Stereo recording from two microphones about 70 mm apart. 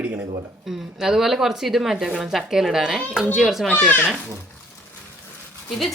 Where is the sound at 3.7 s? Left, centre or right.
Left.